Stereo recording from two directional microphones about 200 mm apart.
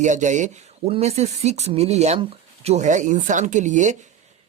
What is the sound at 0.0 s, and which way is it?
Speech, 35° right (ahead or behind).